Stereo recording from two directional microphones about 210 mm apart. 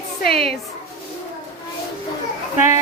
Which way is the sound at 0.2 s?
45° left (ahead or behind).